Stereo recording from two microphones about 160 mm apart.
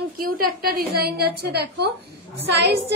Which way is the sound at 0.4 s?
70° right (ahead or behind).